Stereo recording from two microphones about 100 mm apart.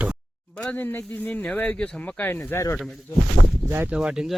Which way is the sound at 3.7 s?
20° right (ahead or behind).